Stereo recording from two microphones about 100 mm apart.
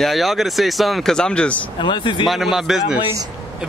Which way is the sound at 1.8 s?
55° left (ahead or behind).